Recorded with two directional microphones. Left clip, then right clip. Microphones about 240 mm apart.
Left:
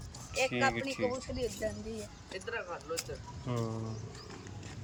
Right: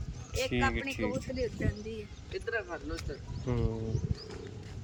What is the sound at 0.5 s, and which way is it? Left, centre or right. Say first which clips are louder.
Speech: even; centre.